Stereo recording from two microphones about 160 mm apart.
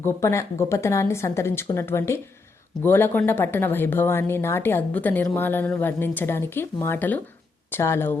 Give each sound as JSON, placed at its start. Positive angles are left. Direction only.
{"t": 0.0, "sound": "speech", "side_deg": 15}